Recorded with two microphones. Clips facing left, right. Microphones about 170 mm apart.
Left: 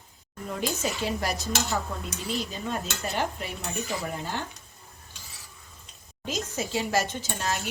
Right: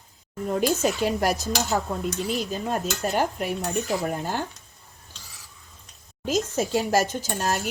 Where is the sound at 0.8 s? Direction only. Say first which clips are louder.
Right 6 dB; 45° right (ahead or behind).